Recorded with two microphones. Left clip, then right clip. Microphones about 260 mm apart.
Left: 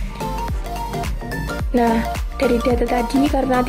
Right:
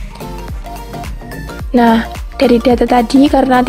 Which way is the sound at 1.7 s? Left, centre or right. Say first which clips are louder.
Right 7 dB; right.